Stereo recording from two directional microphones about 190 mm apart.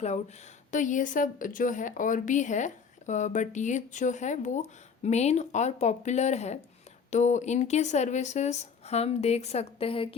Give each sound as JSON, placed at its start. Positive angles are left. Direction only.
{"t": 0.7, "sound": "a woman's voice", "side_deg": 40}